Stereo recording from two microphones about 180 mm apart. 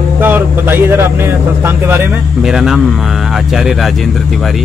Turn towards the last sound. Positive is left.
turn(degrees=0)  # may be behind; listen again after turning